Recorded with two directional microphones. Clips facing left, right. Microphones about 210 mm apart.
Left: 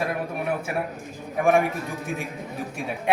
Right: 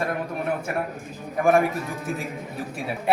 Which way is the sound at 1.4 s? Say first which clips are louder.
Right 1 dB; centre (ahead or behind).